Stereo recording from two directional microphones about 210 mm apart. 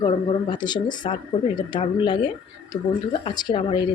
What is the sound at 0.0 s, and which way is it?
Speech, 20° left (ahead or behind).